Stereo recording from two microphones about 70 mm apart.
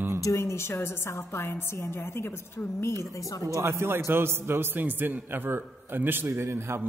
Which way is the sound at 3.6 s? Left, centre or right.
Right.